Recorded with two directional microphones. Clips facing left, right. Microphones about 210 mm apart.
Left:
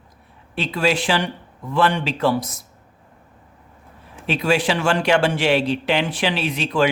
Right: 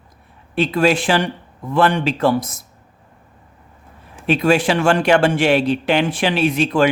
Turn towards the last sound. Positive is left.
turn(degrees=-50)  # may be behind; listen again after turning